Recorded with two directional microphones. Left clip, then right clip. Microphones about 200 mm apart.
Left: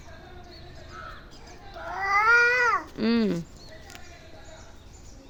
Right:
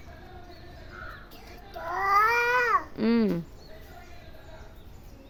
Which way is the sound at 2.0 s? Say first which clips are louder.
Left 3 dB; 20° right (ahead or behind).